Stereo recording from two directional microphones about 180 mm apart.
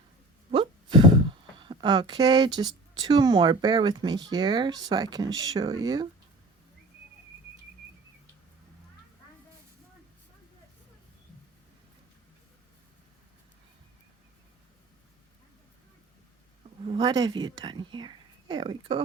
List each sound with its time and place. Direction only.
0.5 s speech: 25° right (ahead or behind)
16.8 s speech: 25° right (ahead or behind)